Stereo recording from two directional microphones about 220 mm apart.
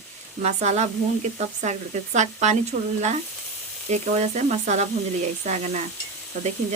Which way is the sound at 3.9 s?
30° right (ahead or behind).